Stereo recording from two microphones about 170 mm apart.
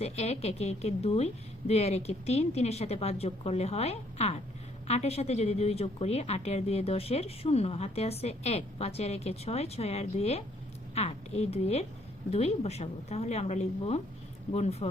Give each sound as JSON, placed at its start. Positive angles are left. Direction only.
{"t": 0.0, "sound": "a woman's voice", "side_deg": 40}